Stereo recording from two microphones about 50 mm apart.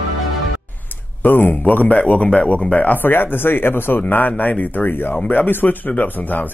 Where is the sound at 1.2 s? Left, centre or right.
Left.